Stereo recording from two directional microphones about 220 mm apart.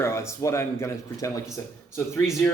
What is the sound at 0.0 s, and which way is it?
Speech, 10° left (ahead or behind).